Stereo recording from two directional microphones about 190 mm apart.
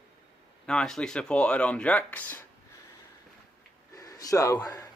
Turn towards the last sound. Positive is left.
turn(degrees=15)  # may be behind; listen again after turning